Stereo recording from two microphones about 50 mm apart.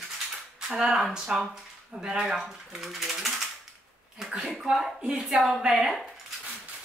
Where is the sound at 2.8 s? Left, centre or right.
Centre.